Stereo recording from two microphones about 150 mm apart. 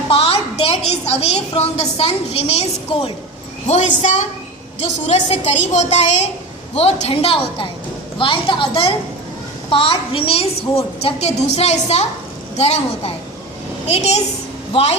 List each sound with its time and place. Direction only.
0.1 s a sound: 40° left (ahead or behind)
0.9 s a woman's voice: 45° left (ahead or behind)
4.0 s a woman's voice: 50° left (ahead or behind)